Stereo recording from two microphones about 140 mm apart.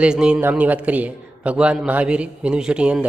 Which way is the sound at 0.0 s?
5° right (ahead or behind).